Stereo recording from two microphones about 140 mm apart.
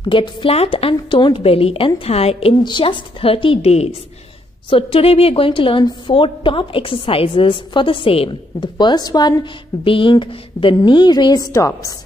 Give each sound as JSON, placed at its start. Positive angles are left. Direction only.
{"t": 0.0, "sound": "a woman's voice", "side_deg": 35}
{"t": 2.6, "sound": "a woman's voice", "side_deg": 35}